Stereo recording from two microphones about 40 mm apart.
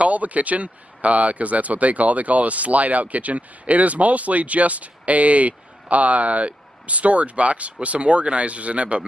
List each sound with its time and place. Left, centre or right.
0.0 s speech: right